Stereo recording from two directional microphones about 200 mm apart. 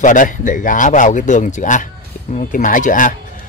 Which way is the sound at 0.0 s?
40° left (ahead or behind).